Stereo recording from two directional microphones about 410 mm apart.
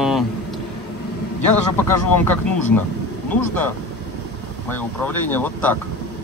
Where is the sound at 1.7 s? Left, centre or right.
Centre.